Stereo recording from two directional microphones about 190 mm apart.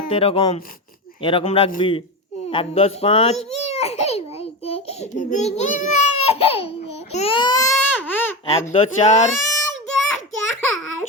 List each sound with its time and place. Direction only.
0.1 s speech: 30° left (ahead or behind)
2.5 s a sound: 30° left (ahead or behind); by 8.4 s 10° left (ahead or behind)
8.7 s speech: 35° left (ahead or behind)
9.6 s child singing: 80° right